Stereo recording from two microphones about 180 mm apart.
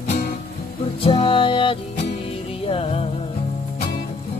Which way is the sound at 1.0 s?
30° left (ahead or behind).